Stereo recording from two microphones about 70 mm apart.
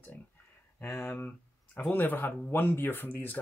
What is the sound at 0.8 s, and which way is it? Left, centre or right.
Speech, left.